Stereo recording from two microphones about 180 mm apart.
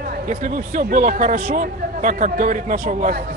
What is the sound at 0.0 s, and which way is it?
Speech, 45° right (ahead or behind).